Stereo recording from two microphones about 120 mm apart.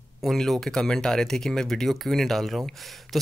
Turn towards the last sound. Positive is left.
turn(degrees=0)  # may be behind; listen again after turning